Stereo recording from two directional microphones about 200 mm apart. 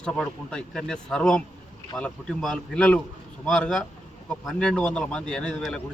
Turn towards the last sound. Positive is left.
turn(degrees=5)  # may be behind; listen again after turning